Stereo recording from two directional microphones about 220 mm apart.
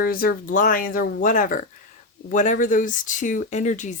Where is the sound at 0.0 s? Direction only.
40° left (ahead or behind).